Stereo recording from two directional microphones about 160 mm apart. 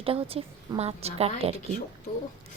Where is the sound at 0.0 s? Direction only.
35° right (ahead or behind).